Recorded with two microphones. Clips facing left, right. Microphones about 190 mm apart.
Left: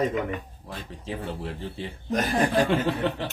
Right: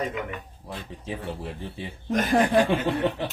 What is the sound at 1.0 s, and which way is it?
Speech, 15° right (ahead or behind).